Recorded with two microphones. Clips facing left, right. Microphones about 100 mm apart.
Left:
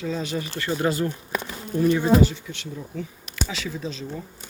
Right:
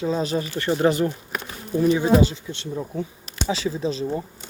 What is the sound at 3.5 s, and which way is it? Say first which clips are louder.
Speech: right 12 dB; 30° right (ahead or behind).